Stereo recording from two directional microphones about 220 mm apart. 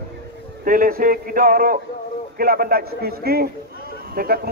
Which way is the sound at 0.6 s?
40° right (ahead or behind).